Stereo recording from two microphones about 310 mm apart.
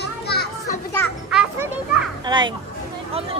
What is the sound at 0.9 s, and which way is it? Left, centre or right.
Children playing, centre.